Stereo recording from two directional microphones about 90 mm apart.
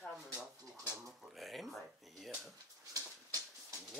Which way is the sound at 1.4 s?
Centre (ahead or behind).